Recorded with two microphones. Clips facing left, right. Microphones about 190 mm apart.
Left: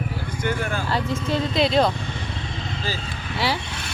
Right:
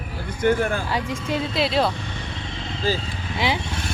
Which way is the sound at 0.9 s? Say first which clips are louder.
Left 1 dB; 10° right (ahead or behind).